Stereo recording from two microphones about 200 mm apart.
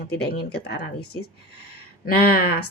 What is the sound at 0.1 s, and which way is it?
Speech, 55° left (ahead or behind).